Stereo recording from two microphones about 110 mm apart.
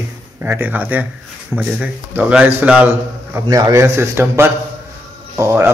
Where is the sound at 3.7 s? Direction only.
25° right (ahead or behind).